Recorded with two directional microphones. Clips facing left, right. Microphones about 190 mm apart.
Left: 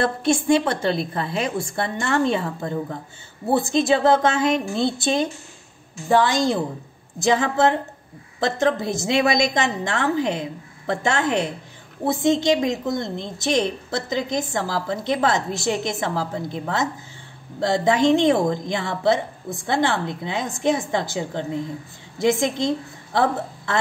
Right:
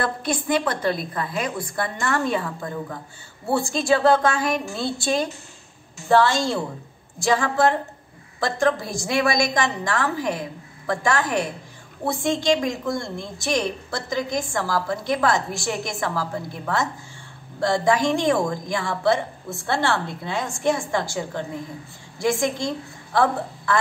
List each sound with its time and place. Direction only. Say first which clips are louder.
0.0 s a woman's voice: left 5 dB; 25° left (ahead or behind)